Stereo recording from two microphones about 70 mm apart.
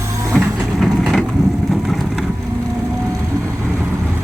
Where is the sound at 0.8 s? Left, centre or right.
Centre.